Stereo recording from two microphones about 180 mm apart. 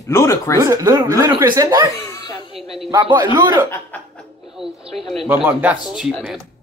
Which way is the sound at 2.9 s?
25° right (ahead or behind).